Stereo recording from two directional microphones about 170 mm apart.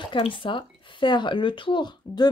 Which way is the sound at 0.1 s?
30° left (ahead or behind).